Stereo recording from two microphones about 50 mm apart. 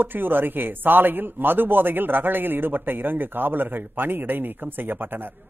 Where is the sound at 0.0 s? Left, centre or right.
Right.